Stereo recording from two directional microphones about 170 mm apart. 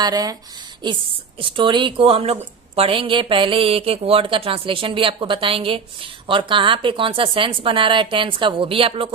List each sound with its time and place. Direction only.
0.0 s speech: 20° right (ahead or behind)
1.4 s speech: 30° right (ahead or behind)